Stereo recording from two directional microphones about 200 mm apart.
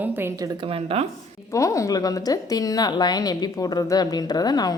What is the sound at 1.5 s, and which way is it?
A woman's voice, 15° left (ahead or behind).